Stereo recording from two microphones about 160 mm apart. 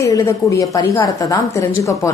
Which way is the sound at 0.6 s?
20° left (ahead or behind).